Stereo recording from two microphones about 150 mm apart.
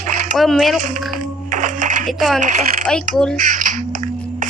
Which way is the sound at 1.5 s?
60° right (ahead or behind).